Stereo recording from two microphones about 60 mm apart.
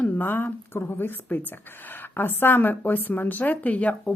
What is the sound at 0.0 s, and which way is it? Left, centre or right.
A woman's voice, left.